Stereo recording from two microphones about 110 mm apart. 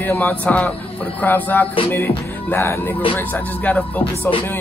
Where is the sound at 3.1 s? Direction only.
15° left (ahead or behind).